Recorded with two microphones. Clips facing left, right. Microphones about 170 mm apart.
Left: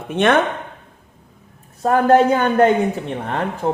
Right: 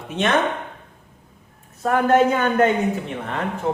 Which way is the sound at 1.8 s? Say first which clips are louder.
Left 3 dB; 35° left (ahead or behind).